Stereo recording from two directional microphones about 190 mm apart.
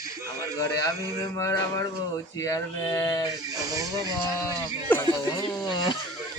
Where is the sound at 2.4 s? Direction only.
15° left (ahead or behind).